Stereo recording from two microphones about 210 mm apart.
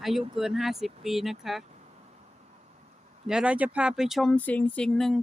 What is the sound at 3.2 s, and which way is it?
Speech, 5° right (ahead or behind).